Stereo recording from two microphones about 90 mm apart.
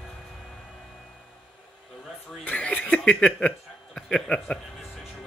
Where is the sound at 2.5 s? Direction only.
15° left (ahead or behind).